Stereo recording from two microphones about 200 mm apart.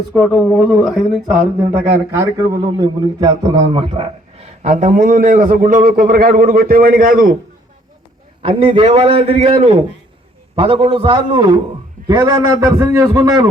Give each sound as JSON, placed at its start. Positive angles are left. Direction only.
{"t": 0.2, "sound": "speech", "side_deg": -5}
{"t": 2.7, "sound": "a man's voice", "side_deg": -20}
{"t": 8.4, "sound": "a man's voice", "side_deg": -30}